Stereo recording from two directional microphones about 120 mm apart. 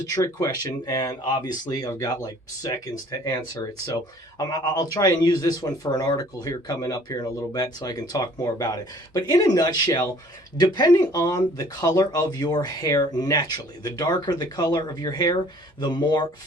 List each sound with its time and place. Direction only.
0.0 s speech: 30° left (ahead or behind)
4.4 s speech: 35° left (ahead or behind)